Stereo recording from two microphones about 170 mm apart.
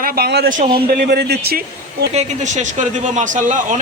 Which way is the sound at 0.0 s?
65° right (ahead or behind).